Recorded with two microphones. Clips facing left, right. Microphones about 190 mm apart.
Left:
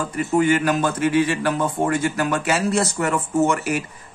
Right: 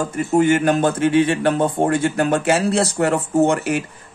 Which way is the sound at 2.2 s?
30° right (ahead or behind).